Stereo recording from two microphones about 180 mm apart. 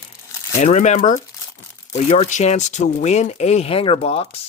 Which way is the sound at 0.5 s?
40° left (ahead or behind).